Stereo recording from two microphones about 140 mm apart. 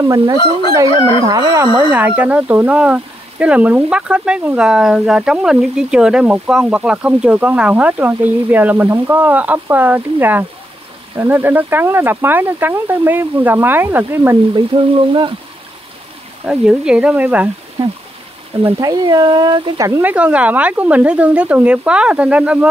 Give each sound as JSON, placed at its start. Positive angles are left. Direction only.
{"t": 0.0, "sound": "speech", "side_deg": -20}
{"t": 1.9, "sound": "speech", "side_deg": -10}
{"t": 14.7, "sound": "speech", "side_deg": -40}
{"t": 16.4, "sound": "speech", "side_deg": -5}
{"t": 18.6, "sound": "speech", "side_deg": -20}
{"t": 20.0, "sound": "speech", "side_deg": -10}